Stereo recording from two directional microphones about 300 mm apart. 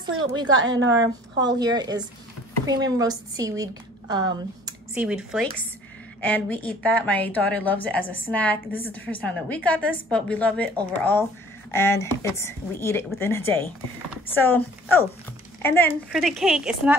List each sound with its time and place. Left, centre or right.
0.2 s a woman's voice: centre
0.7 s a woman's voice: right
1.0 s a woman's voice: centre